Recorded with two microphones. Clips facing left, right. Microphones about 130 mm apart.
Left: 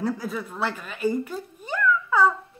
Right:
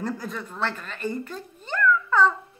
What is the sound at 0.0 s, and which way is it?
Speech, 5° left (ahead or behind).